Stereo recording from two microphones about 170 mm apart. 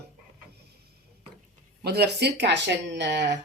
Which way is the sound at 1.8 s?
70° right (ahead or behind).